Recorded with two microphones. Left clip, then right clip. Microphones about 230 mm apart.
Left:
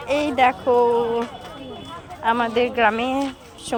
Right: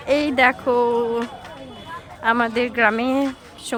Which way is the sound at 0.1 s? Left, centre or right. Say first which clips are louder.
Right 1 dB; centre.